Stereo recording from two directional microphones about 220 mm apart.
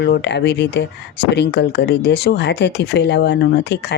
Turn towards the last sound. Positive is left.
turn(degrees=50)  # may be behind; listen again after turning